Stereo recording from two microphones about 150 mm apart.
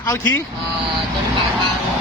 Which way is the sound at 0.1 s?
15° left (ahead or behind).